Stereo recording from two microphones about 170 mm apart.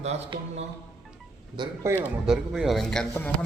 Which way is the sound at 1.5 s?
15° right (ahead or behind).